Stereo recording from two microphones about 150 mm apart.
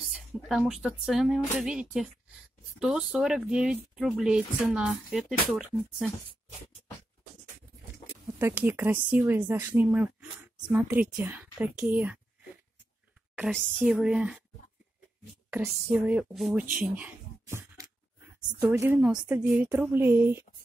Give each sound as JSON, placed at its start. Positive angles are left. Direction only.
{"t": 0.1, "sound": "speech", "side_deg": -5}
{"t": 8.4, "sound": "a woman's voice", "side_deg": -15}
{"t": 13.5, "sound": "speech", "side_deg": 5}
{"t": 13.8, "sound": "a woman's voice", "side_deg": -10}
{"t": 15.5, "sound": "a woman's voice", "side_deg": -10}
{"t": 16.7, "sound": "a sound", "side_deg": -10}
{"t": 18.6, "sound": "a woman's voice", "side_deg": -15}